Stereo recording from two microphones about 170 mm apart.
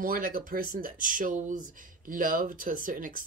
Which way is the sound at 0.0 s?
55° right (ahead or behind).